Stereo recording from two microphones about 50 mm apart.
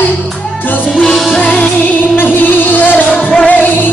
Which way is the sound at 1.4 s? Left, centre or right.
Left.